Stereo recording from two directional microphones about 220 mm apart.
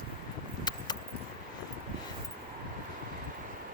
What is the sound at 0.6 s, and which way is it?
Keys jangling, 20° left (ahead or behind).